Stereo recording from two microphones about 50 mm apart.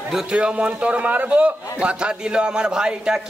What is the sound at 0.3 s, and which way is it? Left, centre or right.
A man's voice, right.